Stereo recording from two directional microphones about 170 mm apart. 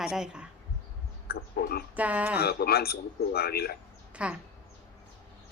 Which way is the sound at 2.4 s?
65° left (ahead or behind).